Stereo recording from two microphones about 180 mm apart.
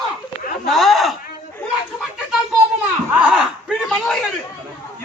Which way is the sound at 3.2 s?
5° right (ahead or behind).